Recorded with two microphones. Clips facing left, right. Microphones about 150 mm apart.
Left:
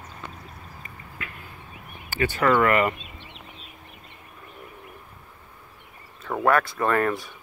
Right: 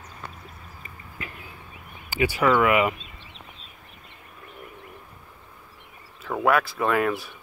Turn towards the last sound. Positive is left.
turn(degrees=-5)  # may be behind; listen again after turning